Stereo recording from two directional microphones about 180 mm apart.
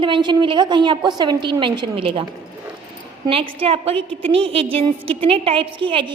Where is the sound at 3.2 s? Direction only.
30° right (ahead or behind).